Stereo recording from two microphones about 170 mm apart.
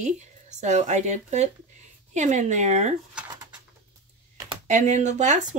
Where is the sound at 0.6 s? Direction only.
45° right (ahead or behind).